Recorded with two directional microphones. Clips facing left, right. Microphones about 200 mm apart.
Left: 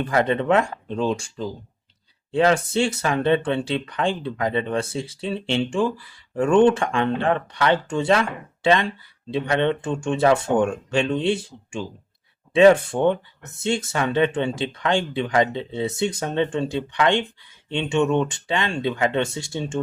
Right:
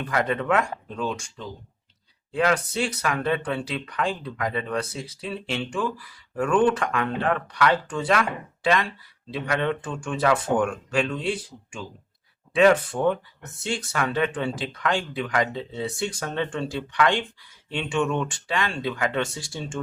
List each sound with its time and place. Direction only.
0.0 s speech: 25° left (ahead or behind)